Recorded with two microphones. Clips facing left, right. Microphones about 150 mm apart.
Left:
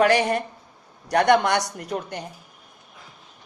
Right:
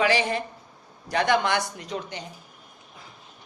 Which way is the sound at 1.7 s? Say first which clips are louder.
Left 4 dB; 55° left (ahead or behind).